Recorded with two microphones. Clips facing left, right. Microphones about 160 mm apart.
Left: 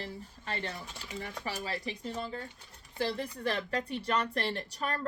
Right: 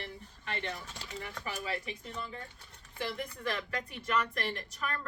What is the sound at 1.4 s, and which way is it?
A woman's voice, 35° left (ahead or behind).